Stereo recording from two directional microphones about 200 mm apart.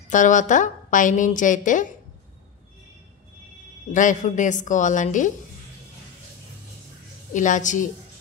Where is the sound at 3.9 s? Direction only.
40° left (ahead or behind).